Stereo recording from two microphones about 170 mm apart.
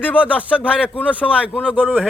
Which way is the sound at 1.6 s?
10° right (ahead or behind).